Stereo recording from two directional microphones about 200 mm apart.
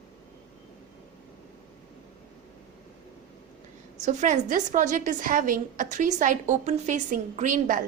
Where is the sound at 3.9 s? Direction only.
35° right (ahead or behind).